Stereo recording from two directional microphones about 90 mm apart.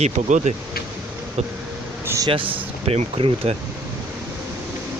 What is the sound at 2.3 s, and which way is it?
Speech, 80° right.